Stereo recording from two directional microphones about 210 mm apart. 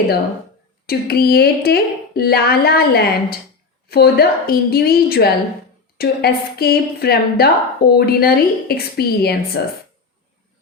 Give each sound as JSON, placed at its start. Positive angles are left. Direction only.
{"t": 0.9, "sound": "a woman's voice", "side_deg": 45}